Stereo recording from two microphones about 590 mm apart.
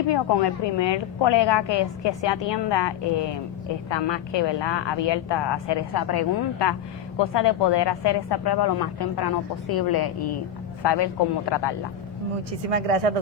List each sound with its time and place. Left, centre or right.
0.1 s a woman's voice: left
12.7 s speech: right